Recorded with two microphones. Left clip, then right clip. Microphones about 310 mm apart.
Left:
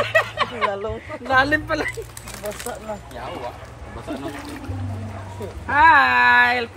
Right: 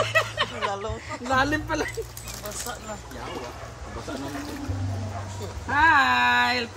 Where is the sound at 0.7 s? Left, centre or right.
Left.